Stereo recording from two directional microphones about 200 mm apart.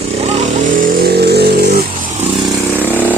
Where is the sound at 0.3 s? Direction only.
40° right (ahead or behind).